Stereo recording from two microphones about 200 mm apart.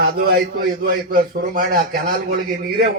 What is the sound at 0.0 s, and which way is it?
A man's voice, 50° right (ahead or behind).